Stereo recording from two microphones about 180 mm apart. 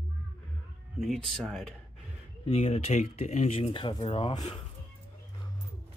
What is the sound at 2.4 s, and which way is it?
Speech, 30° left (ahead or behind).